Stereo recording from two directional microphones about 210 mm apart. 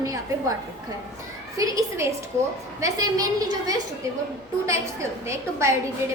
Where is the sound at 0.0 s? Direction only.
15° right (ahead or behind).